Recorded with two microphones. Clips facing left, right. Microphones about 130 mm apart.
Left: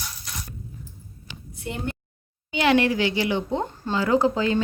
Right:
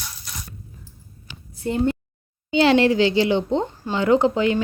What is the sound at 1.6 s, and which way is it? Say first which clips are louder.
A woman's voice: right 10 dB; 35° right (ahead or behind).